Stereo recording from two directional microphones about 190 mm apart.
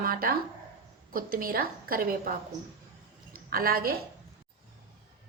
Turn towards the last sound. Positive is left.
turn(degrees=-50)  # may be behind; listen again after turning